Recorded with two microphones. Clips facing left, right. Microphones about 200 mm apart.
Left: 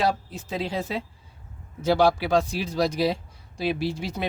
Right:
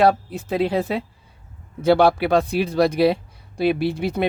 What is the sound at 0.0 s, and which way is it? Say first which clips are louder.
Speech: right 8 dB; 60° right (ahead or behind).